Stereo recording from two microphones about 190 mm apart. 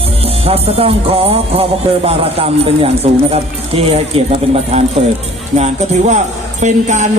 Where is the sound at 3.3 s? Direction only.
30° right (ahead or behind).